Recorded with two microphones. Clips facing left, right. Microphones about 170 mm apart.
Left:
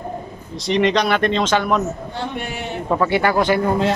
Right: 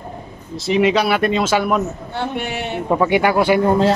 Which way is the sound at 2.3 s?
70° right (ahead or behind).